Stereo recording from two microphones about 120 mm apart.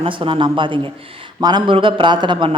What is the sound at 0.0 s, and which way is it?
A man's voice, 45° right (ahead or behind).